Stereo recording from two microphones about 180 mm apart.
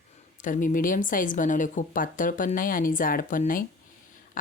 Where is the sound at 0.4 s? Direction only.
45° left (ahead or behind).